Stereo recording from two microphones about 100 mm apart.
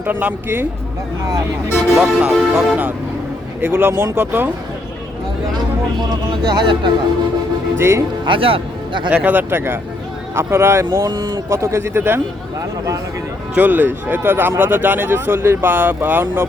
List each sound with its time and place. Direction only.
0.0 s speech: 15° right (ahead or behind)
2.0 s music: 10° right (ahead or behind)
3.6 s speech: 25° right (ahead or behind)
6.5 s speech: 50° right (ahead or behind)
7.8 s speech: 25° right (ahead or behind)
8.2 s a man's voice: 60° right (ahead or behind)
9.0 s speech: 15° right (ahead or behind)
10.9 s speech: 40° right (ahead or behind); by 12.2 s 25° right (ahead or behind)
13.6 s speech: 20° right (ahead or behind)